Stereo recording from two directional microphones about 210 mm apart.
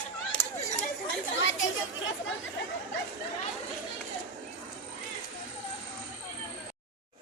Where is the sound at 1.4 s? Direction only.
65° left (ahead or behind).